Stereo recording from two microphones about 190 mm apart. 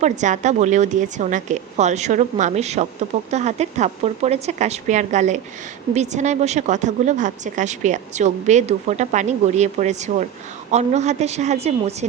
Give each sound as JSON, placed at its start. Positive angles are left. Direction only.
{"t": 0.0, "sound": "a woman's voice", "side_deg": -40}